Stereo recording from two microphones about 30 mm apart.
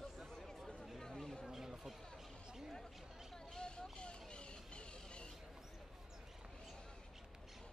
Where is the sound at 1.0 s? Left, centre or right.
Centre.